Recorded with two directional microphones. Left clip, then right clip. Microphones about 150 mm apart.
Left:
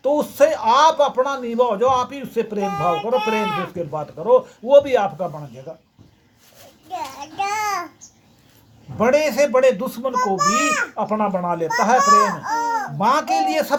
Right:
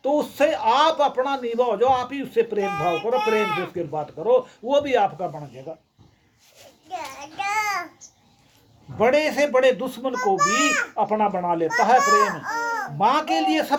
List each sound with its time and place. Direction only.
0.0 s a man's voice: 30° right (ahead or behind)
6.9 s child singing: 20° left (ahead or behind)
9.0 s a man's voice: 25° right (ahead or behind)
10.3 s a child's voice: 20° left (ahead or behind)
10.9 s a man's voice: 30° right (ahead or behind)
11.9 s speech: 15° left (ahead or behind)
13.0 s a man's voice: 25° right (ahead or behind)